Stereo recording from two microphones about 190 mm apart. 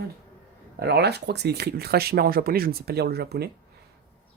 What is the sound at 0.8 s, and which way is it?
Speech, 60° right (ahead or behind).